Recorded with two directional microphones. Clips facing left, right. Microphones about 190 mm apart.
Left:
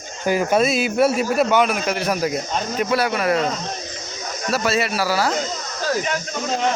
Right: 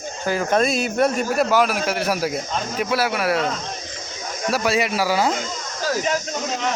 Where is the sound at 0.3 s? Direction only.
10° left (ahead or behind); by 5.3 s 15° right (ahead or behind).